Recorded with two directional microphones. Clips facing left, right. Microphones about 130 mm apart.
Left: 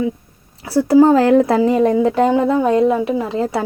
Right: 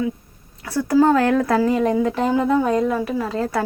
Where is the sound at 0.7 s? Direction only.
30° left (ahead or behind).